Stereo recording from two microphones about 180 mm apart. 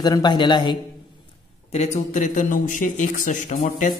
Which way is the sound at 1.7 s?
40° left (ahead or behind).